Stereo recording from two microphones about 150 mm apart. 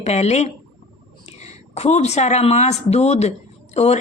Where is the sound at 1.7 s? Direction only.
45° left (ahead or behind).